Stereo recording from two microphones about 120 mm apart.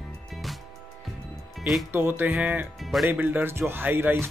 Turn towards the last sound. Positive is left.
turn(degrees=-15)  # may be behind; listen again after turning